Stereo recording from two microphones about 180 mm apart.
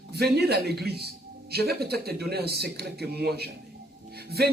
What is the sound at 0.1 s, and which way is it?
Speech, 65° right (ahead or behind).